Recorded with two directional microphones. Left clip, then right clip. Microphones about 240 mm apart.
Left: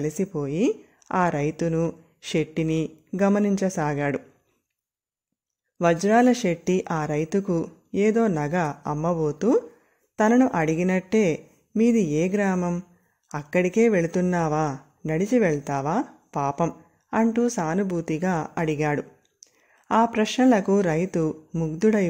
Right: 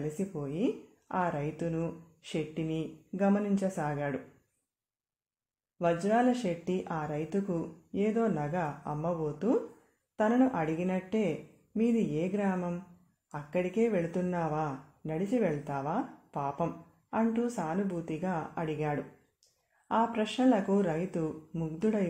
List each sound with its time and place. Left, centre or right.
0.2 s speech: left
5.8 s speech: left